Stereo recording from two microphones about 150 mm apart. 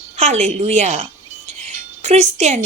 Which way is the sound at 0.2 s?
50° right (ahead or behind).